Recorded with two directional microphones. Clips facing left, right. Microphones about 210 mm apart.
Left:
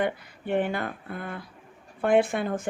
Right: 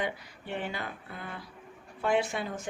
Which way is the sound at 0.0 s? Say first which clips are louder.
Left 6 dB; 55° left (ahead or behind).